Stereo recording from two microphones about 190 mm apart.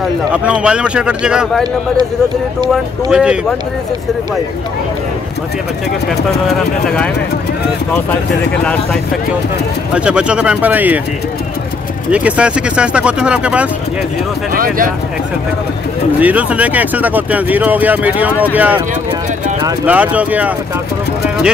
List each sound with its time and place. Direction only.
0.3 s speech: 5° right (ahead or behind)
2.7 s speech: 5° right (ahead or behind)
9.9 s speech: 5° right (ahead or behind)
12.1 s speech: 5° right (ahead or behind)
14.5 s speech: 50° right (ahead or behind)
16.2 s speech: 10° right (ahead or behind)
19.9 s speech: 5° right (ahead or behind)